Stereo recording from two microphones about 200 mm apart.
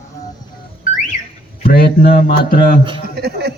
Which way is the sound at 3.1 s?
55° right (ahead or behind).